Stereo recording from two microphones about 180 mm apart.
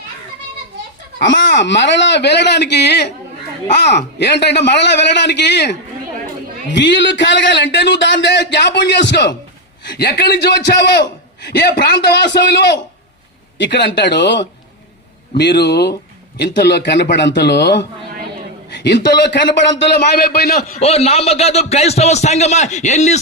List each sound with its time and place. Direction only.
1.2 s a man's voice: 80° left
6.7 s a man's voice: 75° left (ahead or behind)
20.7 s a man's voice: 35° left (ahead or behind)